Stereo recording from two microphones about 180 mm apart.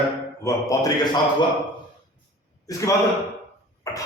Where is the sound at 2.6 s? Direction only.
20° left (ahead or behind).